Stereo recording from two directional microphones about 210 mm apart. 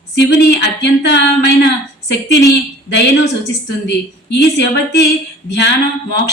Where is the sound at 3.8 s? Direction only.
55° left (ahead or behind).